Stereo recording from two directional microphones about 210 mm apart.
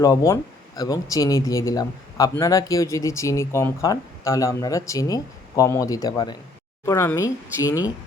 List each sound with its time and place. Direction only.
0.0 s speech: 15° left (ahead or behind)